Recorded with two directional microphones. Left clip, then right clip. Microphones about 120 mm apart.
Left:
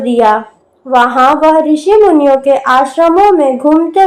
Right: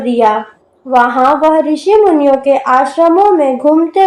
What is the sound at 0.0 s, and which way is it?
A woman's voice, 45° left (ahead or behind).